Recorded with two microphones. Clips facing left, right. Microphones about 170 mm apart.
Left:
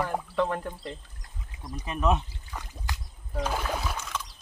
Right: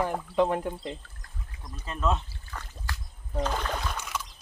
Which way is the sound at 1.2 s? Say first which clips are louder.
Left 3 dB; 15° left (ahead or behind).